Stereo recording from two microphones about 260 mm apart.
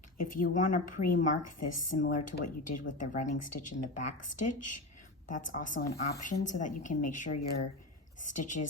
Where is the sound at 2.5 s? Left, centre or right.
Left.